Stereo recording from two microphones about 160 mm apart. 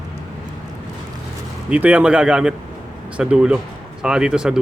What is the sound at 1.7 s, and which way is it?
Speech, 10° right (ahead or behind).